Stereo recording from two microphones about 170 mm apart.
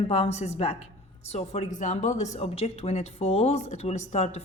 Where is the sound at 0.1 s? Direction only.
40° left (ahead or behind).